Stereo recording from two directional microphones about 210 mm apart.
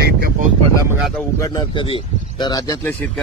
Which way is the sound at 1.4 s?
25° left (ahead or behind).